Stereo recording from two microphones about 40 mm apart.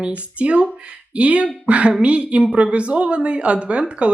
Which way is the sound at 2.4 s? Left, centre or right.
Right.